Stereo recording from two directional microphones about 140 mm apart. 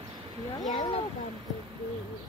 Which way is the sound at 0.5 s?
30° left (ahead or behind).